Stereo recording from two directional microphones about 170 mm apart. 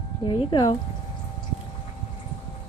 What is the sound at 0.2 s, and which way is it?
Speech, 30° left (ahead or behind).